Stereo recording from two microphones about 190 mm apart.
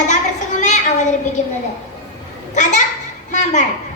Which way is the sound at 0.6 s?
40° left (ahead or behind).